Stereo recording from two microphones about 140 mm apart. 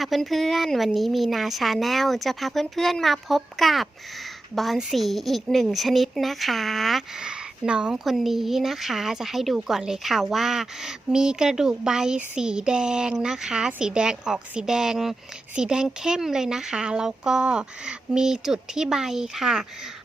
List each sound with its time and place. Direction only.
0.0 s a woman's voice: centre (ahead or behind)